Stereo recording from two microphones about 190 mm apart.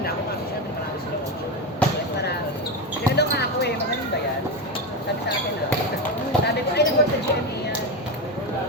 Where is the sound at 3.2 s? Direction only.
60° left (ahead or behind).